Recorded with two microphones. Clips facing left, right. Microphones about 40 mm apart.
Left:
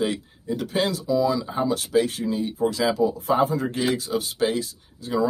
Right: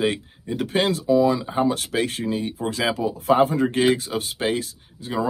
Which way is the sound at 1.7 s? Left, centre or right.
Right.